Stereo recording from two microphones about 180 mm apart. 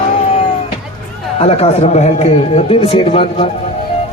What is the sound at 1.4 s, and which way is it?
A man's voice, 35° left (ahead or behind).